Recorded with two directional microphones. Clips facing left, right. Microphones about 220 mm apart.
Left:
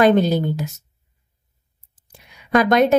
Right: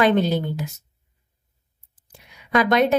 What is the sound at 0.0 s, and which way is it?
Speech, 45° left (ahead or behind).